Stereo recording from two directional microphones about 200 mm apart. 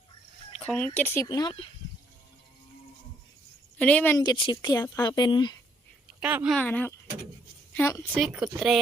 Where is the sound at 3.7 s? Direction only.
5° left (ahead or behind).